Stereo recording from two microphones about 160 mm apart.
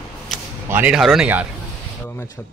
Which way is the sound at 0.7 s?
10° right (ahead or behind).